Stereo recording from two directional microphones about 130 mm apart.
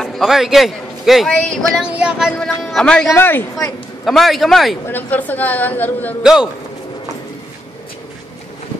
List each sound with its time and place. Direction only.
0.0 s a man's voice: centre (ahead or behind)
3.1 s speech: 15° left (ahead or behind)
4.0 s a man's voice: centre (ahead or behind)
4.8 s speech: 15° left (ahead or behind)
6.2 s a man's voice: 5° right (ahead or behind)